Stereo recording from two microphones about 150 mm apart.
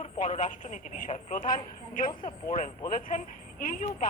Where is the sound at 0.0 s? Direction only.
55° left (ahead or behind).